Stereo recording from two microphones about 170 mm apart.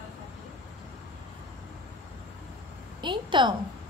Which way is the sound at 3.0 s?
30° right (ahead or behind).